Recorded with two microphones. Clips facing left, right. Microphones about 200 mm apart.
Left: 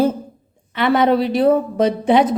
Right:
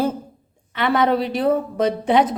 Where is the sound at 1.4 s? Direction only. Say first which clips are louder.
Left 4 dB; 30° left (ahead or behind).